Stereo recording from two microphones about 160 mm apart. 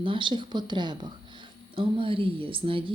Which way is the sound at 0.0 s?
30° right (ahead or behind).